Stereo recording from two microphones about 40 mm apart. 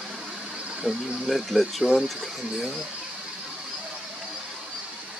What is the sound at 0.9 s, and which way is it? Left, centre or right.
Speech, right.